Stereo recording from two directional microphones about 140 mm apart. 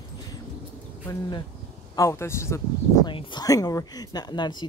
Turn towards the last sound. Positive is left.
turn(degrees=30)  # may be behind; listen again after turning